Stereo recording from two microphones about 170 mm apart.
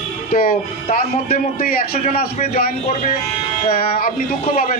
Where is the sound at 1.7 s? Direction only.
60° left (ahead or behind).